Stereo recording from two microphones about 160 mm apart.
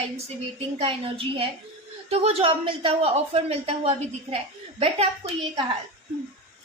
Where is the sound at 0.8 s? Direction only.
35° right (ahead or behind).